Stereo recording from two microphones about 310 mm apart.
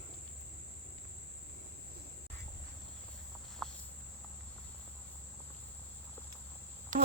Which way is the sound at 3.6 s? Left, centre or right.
Centre.